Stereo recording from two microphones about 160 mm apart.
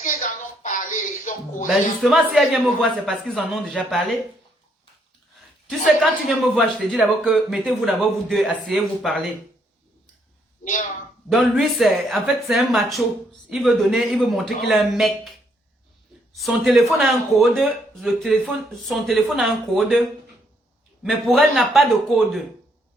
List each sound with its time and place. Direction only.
0.0 s a sound: 50° left (ahead or behind)
1.6 s a man's voice: centre (ahead or behind)
5.6 s a man's voice: 5° right (ahead or behind)
10.6 s speech: 50° left (ahead or behind)
11.3 s a man's voice: centre (ahead or behind)
16.3 s a man's voice: centre (ahead or behind)
21.0 s a man's voice: centre (ahead or behind)